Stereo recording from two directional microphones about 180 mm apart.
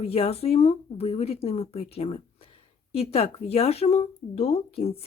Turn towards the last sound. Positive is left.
turn(degrees=35)  # may be behind; listen again after turning